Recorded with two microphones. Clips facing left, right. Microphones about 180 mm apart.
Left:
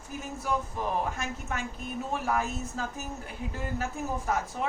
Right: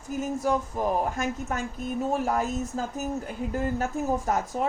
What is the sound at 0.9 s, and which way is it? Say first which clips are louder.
A woman's voice: right 6 dB; 40° right (ahead or behind).